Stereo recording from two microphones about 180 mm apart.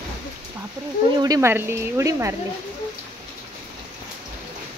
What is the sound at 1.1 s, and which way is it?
Speech, 20° right (ahead or behind).